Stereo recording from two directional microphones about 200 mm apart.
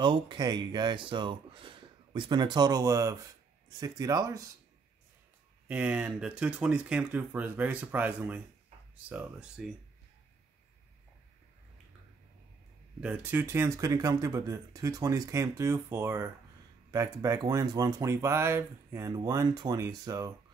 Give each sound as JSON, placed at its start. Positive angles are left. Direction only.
{"t": 0.0, "sound": "speech", "side_deg": -25}
{"t": 5.7, "sound": "speech", "side_deg": -5}
{"t": 13.0, "sound": "speech", "side_deg": -10}